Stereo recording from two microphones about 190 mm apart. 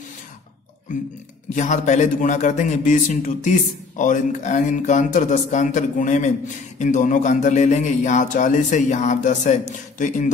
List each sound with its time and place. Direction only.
1.5 s a man's voice: 40° left (ahead or behind)